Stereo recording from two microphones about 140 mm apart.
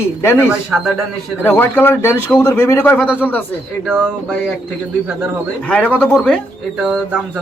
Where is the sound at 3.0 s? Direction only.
10° right (ahead or behind).